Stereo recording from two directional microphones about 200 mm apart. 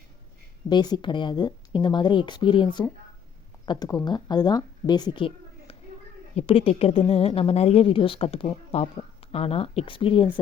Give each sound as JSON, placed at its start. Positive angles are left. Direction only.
{"t": 0.7, "sound": "a woman's voice", "side_deg": 20}